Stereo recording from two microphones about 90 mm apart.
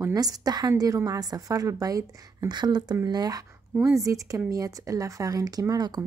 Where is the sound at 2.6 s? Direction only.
55° right (ahead or behind).